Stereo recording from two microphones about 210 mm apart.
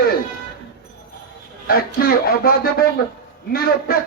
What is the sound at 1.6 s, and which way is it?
A man's voice, 45° left (ahead or behind).